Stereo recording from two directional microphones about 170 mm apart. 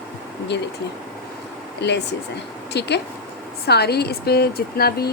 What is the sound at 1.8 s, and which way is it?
Speech, 90° left.